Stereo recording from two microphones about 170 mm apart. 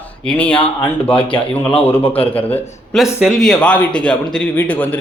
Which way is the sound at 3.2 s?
Centre (ahead or behind).